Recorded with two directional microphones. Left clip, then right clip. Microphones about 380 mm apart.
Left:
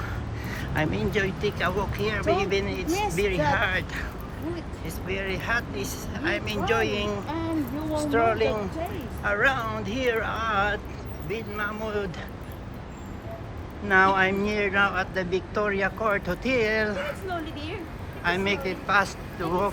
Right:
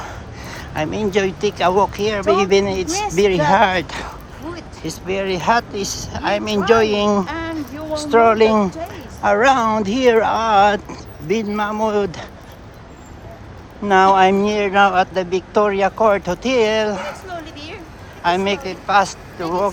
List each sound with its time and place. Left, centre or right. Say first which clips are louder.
0.0 s speech: right 4 dB; centre
2.8 s speech: right 5 dB; right
3.2 s speech: right 13 dB; centre
13.8 s speech: right 8 dB; centre